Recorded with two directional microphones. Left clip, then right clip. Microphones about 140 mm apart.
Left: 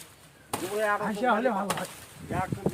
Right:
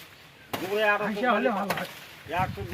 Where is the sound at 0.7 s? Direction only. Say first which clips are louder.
Right 3 dB; 45° right (ahead or behind).